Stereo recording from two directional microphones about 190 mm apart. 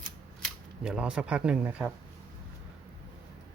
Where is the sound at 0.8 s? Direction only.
5° right (ahead or behind).